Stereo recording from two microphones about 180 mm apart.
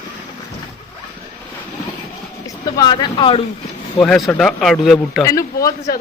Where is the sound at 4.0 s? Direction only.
Centre (ahead or behind).